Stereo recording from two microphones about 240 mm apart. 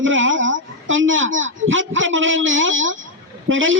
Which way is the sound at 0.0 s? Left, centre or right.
Right.